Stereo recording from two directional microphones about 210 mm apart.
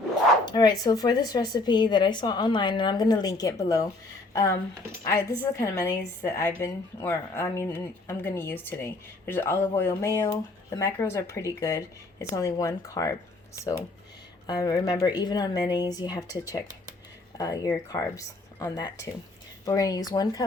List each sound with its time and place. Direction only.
0.4 s a woman's voice: 20° left (ahead or behind)